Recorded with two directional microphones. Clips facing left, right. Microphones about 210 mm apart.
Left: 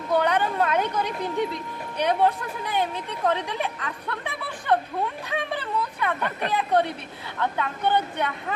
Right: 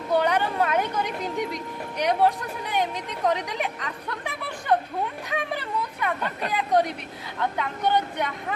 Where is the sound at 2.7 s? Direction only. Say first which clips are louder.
Even; 15° right (ahead or behind).